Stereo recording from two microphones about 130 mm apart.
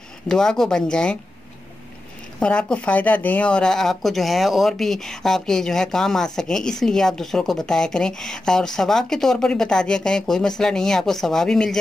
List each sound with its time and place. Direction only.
0.3 s speech: 5° left (ahead or behind)
2.4 s speech: 10° left (ahead or behind)